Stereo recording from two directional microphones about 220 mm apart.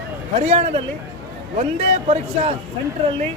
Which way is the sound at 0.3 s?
30° right (ahead or behind).